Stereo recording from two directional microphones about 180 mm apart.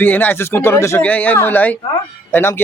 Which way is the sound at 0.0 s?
10° left (ahead or behind).